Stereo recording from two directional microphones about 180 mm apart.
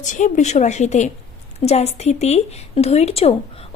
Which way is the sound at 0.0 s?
45° left (ahead or behind).